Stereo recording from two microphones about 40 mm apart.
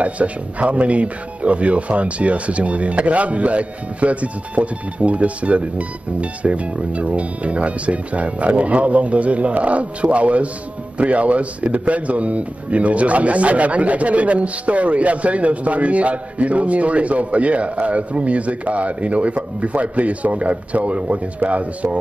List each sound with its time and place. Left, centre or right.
0.0 s a man's voice: right